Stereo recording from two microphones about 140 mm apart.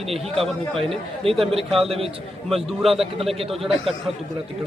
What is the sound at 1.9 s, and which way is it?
Speech, 45° right (ahead or behind).